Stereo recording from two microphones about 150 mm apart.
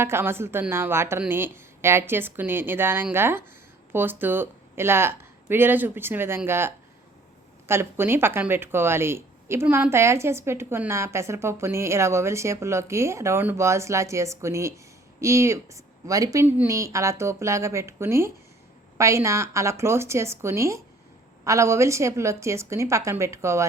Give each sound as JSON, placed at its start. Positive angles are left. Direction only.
{"t": 0.0, "sound": "a woman's voice", "side_deg": -15}